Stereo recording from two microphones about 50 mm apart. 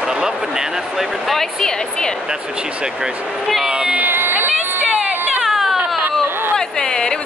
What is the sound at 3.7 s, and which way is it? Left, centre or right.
Speech, centre.